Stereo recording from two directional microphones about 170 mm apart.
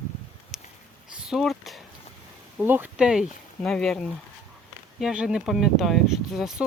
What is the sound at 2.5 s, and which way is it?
Speech, 10° right (ahead or behind).